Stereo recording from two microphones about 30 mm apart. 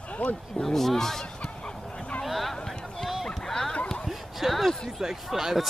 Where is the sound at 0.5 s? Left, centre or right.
Centre.